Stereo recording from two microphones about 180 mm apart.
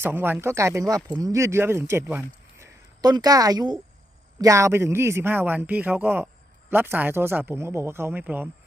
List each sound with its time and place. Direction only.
0.0 s a woman's voice: 10° right (ahead or behind)